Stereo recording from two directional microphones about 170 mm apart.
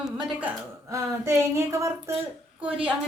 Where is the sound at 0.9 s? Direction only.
15° right (ahead or behind).